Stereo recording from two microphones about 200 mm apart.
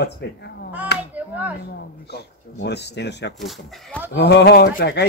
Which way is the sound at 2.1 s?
55° left (ahead or behind).